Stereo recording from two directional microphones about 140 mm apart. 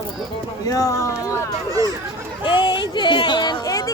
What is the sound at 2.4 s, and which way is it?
Speech, 35° left (ahead or behind).